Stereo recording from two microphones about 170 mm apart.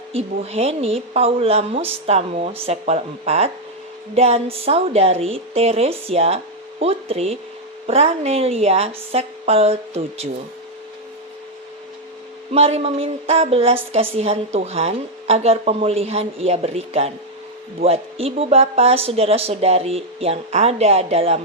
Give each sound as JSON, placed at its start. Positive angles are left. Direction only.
{"t": 0.1, "sound": "a woman's voice", "side_deg": -35}
{"t": 12.5, "sound": "a woman's voice", "side_deg": -35}